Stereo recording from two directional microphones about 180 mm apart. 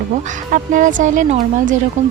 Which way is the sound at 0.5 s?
45° right (ahead or behind).